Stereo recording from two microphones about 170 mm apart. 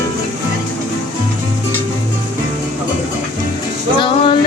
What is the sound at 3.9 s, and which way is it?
Music, 30° left (ahead or behind).